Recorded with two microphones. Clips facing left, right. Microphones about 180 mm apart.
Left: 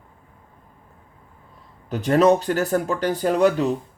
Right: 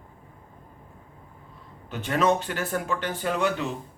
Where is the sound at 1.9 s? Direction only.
40° left (ahead or behind).